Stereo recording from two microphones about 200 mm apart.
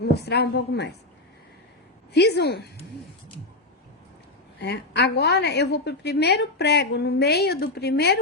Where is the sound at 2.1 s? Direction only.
55° left (ahead or behind).